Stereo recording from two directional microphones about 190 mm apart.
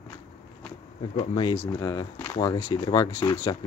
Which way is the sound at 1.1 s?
25° left (ahead or behind).